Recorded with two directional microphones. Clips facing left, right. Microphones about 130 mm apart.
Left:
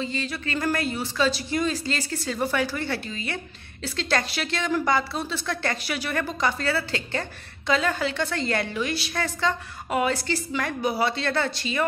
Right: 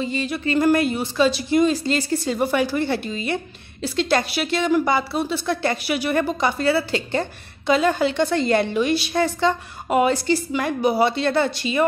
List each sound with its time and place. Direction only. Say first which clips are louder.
0.0 s a woman's voice: right 6 dB; 15° right (ahead or behind)